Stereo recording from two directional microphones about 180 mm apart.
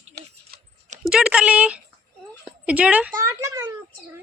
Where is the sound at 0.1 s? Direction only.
70° right (ahead or behind).